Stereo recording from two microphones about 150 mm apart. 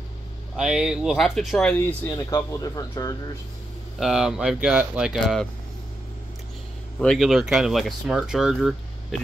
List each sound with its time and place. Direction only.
0.6 s speech: 5° right (ahead or behind)
2.0 s speech: 25° left (ahead or behind)
4.0 s speech: 5° right (ahead or behind)
7.0 s speech: centre (ahead or behind)